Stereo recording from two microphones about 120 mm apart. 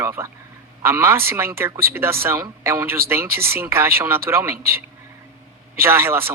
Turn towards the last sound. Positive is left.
turn(degrees=-20)  # may be behind; listen again after turning